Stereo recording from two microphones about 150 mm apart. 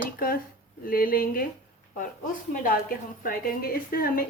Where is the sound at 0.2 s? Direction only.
75° left (ahead or behind).